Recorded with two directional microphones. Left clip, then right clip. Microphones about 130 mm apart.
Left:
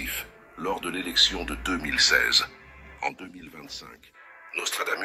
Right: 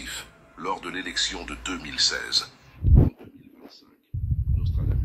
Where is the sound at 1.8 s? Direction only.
20° left (ahead or behind).